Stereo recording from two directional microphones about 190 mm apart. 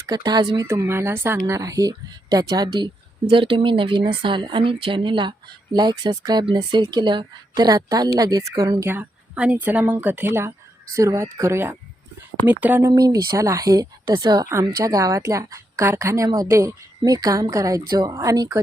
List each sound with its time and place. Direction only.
0.0 s a woman's voice: 20° right (ahead or behind)
12.9 s a woman's voice: 20° right (ahead or behind)